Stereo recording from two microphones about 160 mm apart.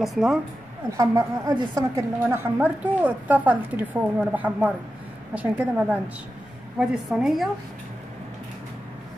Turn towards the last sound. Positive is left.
turn(degrees=0)  # may be behind; listen again after turning